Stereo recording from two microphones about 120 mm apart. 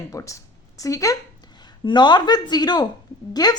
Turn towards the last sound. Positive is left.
turn(degrees=35)  # may be behind; listen again after turning